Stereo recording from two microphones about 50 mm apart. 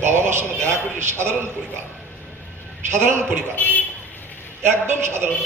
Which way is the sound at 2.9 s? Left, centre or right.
Right.